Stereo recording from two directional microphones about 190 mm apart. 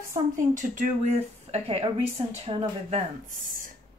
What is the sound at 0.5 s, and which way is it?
Speech, 40° right (ahead or behind).